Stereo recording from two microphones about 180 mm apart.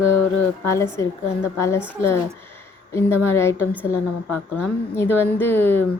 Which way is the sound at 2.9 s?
15° left (ahead or behind).